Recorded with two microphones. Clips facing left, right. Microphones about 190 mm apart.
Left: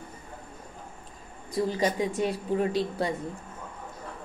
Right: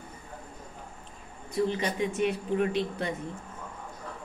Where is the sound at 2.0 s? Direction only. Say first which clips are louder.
Even; 35° left (ahead or behind).